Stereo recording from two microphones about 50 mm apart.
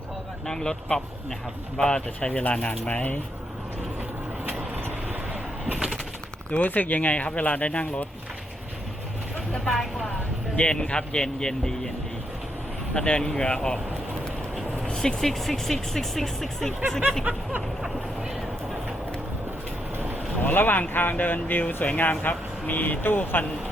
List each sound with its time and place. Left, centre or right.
0.4 s speech: centre
2.4 s speech: left
5.3 s a sound: right
6.5 s speech: left
9.5 s vehicle: centre
10.6 s speech: left
12.9 s speech: centre
14.8 s speech: centre
20.4 s speech: left